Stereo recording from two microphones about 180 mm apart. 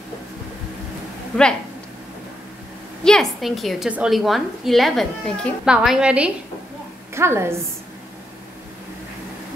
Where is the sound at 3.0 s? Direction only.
Centre (ahead or behind); by 7.6 s 15° right (ahead or behind).